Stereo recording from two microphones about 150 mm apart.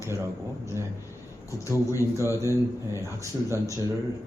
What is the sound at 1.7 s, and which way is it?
Speech, 20° left (ahead or behind).